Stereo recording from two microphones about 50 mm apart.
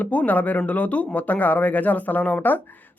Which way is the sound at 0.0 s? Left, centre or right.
Left.